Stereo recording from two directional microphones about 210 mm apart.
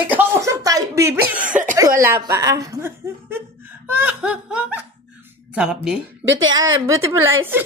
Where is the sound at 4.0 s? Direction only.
5° right (ahead or behind).